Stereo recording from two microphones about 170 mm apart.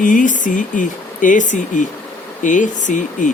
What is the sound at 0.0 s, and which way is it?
Speech, 50° left (ahead or behind).